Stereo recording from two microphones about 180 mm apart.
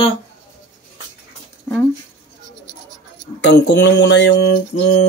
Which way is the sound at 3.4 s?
70° left (ahead or behind).